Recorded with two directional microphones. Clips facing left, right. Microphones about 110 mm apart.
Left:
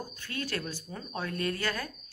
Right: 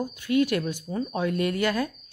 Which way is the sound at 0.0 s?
15° right (ahead or behind).